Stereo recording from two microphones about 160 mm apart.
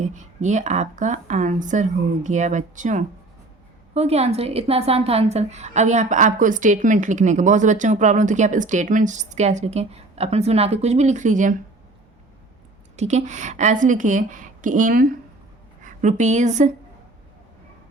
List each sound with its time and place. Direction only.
0.0 s a woman's voice: 50° right (ahead or behind)
13.0 s a woman's voice: 45° right (ahead or behind); by 15.1 s 60° right (ahead or behind)
15.8 s a woman's voice: 50° right (ahead or behind)